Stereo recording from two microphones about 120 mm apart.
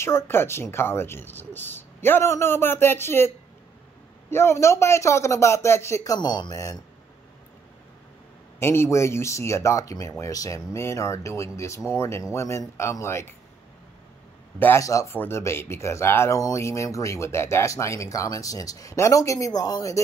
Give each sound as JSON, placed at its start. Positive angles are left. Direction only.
{"t": 0.0, "sound": "speech", "side_deg": 20}
{"t": 4.3, "sound": "speech", "side_deg": 20}
{"t": 6.1, "sound": "speech", "side_deg": 35}
{"t": 8.5, "sound": "speech", "side_deg": 20}
{"t": 14.6, "sound": "speech", "side_deg": 25}